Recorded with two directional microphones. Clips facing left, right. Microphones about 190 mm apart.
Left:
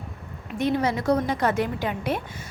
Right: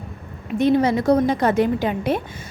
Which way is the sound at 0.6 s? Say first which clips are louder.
Right 6 dB; 25° right (ahead or behind).